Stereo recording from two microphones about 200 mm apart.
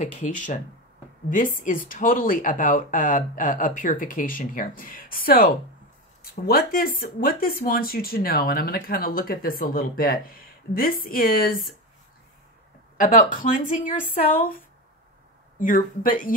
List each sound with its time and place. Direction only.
0.0 s speech: 40° left (ahead or behind)
13.0 s speech: 40° left (ahead or behind)
15.6 s speech: 40° left (ahead or behind)